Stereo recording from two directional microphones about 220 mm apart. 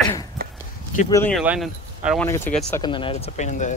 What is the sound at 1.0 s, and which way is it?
Speech, 15° left (ahead or behind).